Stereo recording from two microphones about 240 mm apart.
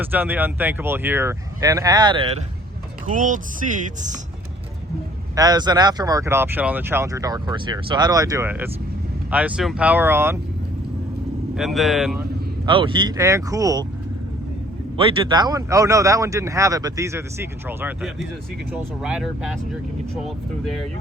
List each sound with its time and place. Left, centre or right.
0.0 s speech: centre
3.1 s speech: right
5.3 s speech: centre
11.5 s speech: centre
12.6 s speech: right
14.9 s speech: right; by 19.5 s centre